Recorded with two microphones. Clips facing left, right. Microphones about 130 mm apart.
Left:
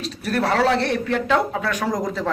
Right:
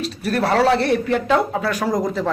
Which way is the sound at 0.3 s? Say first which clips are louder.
Right 2 dB; 5° right (ahead or behind).